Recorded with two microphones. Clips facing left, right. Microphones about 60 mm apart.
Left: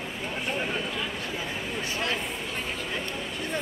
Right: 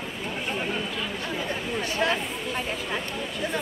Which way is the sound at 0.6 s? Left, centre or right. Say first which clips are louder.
Right 1 dB; centre.